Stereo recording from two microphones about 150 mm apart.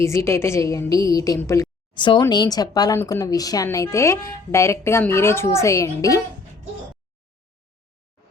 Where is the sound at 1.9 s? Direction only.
30° left (ahead or behind).